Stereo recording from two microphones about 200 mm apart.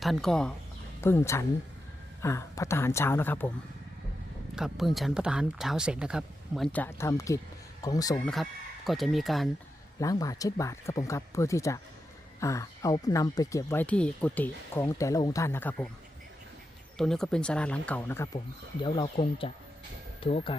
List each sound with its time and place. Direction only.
0.0 s speech: centre (ahead or behind)
4.5 s speech: centre (ahead or behind); by 8.2 s 20° left (ahead or behind)
8.2 s speech: centre (ahead or behind)
10.0 s speech: 15° left (ahead or behind)
17.0 s speech: centre (ahead or behind)
18.8 s speech: 25° left (ahead or behind)